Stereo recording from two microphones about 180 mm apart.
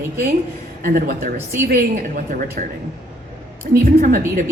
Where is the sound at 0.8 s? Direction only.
55° right (ahead or behind).